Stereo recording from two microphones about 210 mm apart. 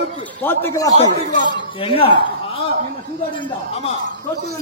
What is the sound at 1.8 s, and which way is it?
Speech, 25° left (ahead or behind).